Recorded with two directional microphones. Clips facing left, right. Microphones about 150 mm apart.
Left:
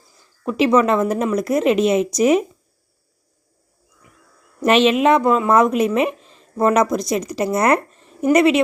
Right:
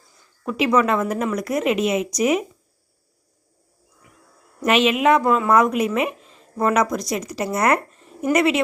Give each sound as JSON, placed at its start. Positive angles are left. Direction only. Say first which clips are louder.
{"t": 0.4, "sound": "speech", "louder": "left 3 dB", "side_deg": 30}
{"t": 4.6, "sound": "speech", "louder": "left 3 dB", "side_deg": 30}